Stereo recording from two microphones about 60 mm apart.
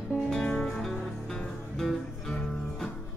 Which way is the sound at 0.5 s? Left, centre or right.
Centre.